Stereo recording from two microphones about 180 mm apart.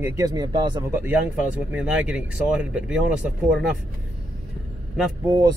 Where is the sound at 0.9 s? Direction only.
10° right (ahead or behind).